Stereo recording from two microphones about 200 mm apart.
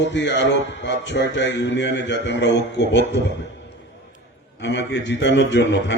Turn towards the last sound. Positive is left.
turn(degrees=65)  # may be behind; listen again after turning